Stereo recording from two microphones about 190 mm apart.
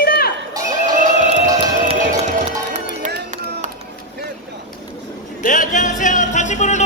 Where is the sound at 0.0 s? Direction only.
50° left (ahead or behind).